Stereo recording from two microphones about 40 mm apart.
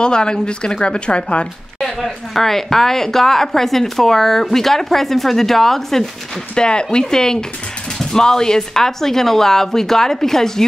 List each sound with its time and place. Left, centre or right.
0.0 s speech: left
1.8 s a sound: centre
2.0 s a woman's voice: centre
6.5 s a woman's voice: left